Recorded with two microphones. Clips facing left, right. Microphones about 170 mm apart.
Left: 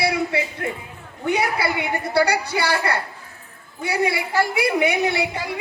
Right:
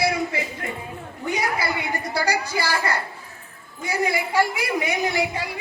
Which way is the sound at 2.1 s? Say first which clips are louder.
Left 5 dB; 65° left (ahead or behind).